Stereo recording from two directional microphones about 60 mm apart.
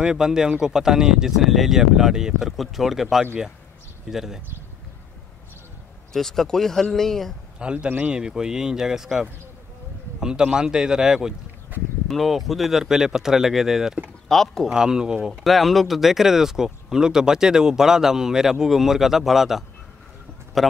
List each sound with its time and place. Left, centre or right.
0.0 s speech: centre
6.1 s speech: centre
7.5 s a man's voice: centre
12.1 s speech: centre
14.3 s speech: centre
14.7 s speech: centre
15.4 s speech: centre